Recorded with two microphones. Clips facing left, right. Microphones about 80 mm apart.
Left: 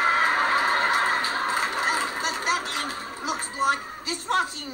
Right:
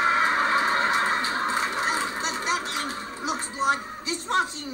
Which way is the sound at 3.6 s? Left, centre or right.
Left.